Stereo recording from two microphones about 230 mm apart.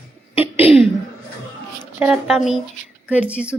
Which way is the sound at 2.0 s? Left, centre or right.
Centre.